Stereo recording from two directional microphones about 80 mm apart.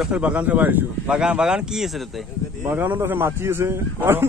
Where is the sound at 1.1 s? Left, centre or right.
Centre.